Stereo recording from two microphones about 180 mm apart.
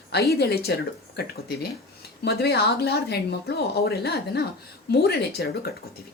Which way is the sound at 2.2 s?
60° left (ahead or behind).